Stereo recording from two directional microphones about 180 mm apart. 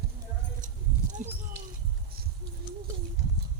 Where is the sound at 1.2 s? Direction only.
45° right (ahead or behind).